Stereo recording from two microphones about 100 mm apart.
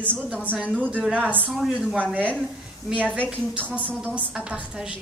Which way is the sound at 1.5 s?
5° right (ahead or behind).